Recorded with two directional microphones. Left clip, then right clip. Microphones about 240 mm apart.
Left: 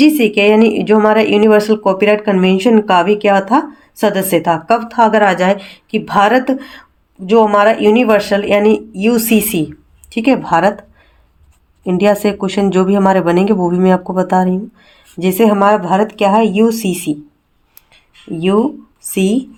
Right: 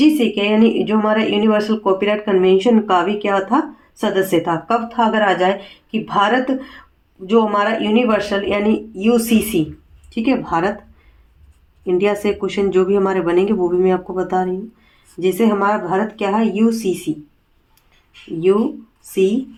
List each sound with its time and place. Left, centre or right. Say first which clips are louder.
0.0 s speech: left 5 dB; left
11.9 s speech: left 4 dB; left